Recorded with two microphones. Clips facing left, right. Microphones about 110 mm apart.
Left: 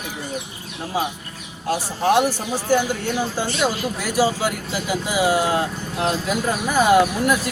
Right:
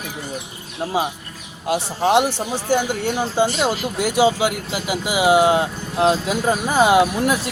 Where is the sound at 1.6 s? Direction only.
20° right (ahead or behind).